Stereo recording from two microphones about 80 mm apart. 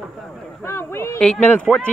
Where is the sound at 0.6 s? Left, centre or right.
Left.